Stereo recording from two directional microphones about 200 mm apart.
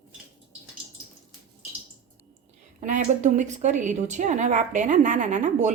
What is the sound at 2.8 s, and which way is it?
A woman's voice, 40° right (ahead or behind).